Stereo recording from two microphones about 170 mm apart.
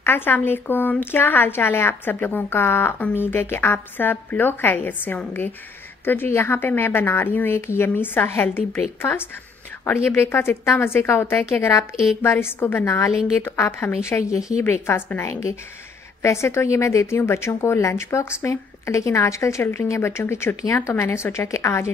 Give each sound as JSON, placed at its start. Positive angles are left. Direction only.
{"t": 0.0, "sound": "a woman's voice", "side_deg": 10}